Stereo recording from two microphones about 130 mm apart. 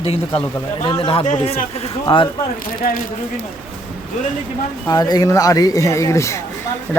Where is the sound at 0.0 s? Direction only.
45° left (ahead or behind).